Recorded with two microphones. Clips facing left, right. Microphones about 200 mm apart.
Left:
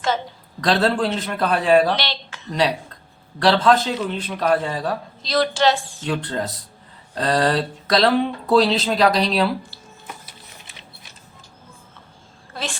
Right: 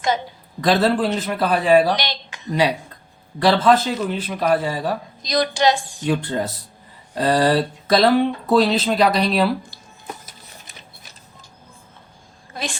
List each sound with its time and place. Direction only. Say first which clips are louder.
0.6 s a man's voice: right 2 dB; 5° right (ahead or behind)
10.2 s printer: even; 45° right (ahead or behind)
12.5 s a woman's voice: right 1 dB; 15° right (ahead or behind)